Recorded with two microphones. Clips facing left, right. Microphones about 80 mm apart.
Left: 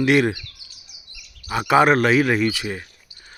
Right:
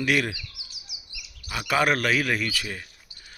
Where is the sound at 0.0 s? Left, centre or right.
Left.